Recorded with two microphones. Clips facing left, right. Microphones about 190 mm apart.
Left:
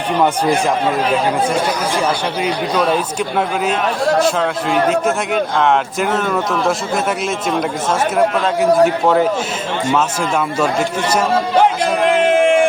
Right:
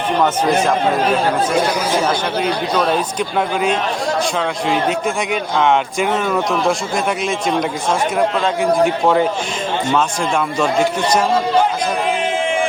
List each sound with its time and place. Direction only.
2.4 s speech: 5° left (ahead or behind)
5.0 s speech: centre (ahead or behind)
8.8 s speech: 5° left (ahead or behind)
12.0 s a sound: 75° left (ahead or behind)